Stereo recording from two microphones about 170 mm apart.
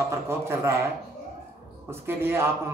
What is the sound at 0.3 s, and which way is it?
Speech, 15° right (ahead or behind).